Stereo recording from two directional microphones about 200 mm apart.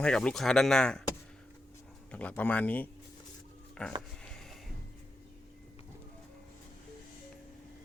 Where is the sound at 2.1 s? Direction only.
5° left (ahead or behind).